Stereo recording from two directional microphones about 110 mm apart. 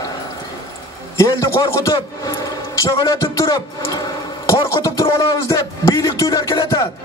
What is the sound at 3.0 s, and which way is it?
Music, 30° left (ahead or behind).